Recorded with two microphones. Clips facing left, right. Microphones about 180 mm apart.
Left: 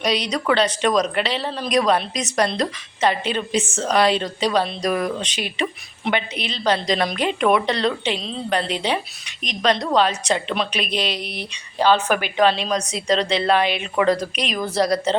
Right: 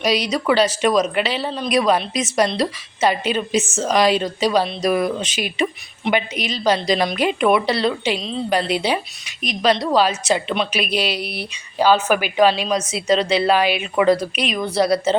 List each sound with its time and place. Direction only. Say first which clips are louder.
0.0 s a woman's voice: right 2 dB; 5° right (ahead or behind)
3.5 s speech: right 2 dB; 30° left (ahead or behind)
3.8 s a woman's voice: right 1 dB; 10° right (ahead or behind)